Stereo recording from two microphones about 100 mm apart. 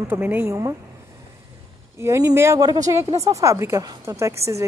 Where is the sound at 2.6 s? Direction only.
40° right (ahead or behind).